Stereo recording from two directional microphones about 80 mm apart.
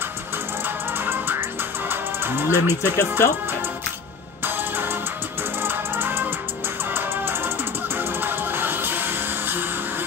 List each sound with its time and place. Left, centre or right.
0.9 s music: right
2.8 s speech: left
4.5 s music: right